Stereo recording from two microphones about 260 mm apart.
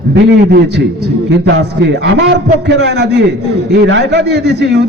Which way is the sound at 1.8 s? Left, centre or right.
Right.